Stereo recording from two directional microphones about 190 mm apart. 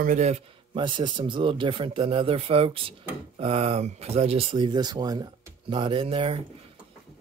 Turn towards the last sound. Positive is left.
turn(degrees=-30)  # may be behind; listen again after turning